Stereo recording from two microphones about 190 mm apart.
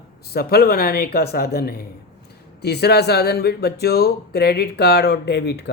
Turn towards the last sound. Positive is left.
turn(degrees=60)  # may be behind; listen again after turning